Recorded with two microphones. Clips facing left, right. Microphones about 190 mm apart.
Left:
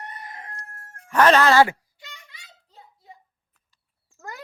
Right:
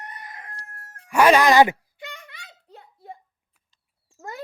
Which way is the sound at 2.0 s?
60° right (ahead or behind).